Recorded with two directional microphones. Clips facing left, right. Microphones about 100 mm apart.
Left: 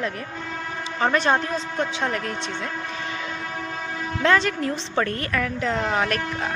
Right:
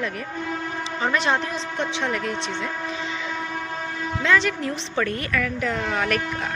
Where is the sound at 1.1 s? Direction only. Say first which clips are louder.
Left 1 dB; 50° left (ahead or behind).